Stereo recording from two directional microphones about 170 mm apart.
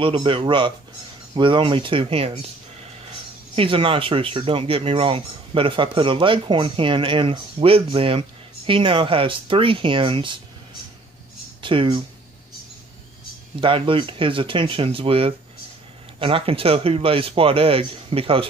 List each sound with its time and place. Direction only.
0.0 s speech: 30° right (ahead or behind)
3.5 s speech: 30° right (ahead or behind)
11.6 s speech: 30° right (ahead or behind)
13.6 s speech: 30° right (ahead or behind)